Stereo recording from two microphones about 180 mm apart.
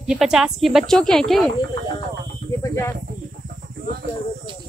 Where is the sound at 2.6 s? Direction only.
20° left (ahead or behind).